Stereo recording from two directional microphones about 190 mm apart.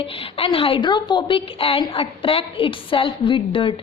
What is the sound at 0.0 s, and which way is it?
A woman's voice, 30° left (ahead or behind).